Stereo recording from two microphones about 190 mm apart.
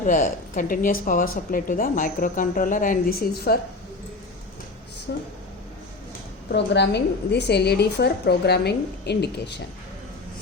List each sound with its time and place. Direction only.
0.0 s a woman's voice: 45° left (ahead or behind)
5.1 s a woman's voice: 65° left (ahead or behind)
6.5 s a woman's voice: 60° left (ahead or behind)